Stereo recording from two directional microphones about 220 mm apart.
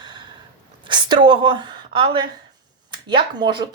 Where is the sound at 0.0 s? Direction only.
20° right (ahead or behind).